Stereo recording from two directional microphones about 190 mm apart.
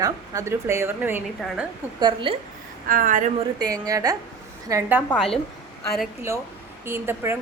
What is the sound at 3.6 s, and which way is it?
A woman's voice, 20° right (ahead or behind).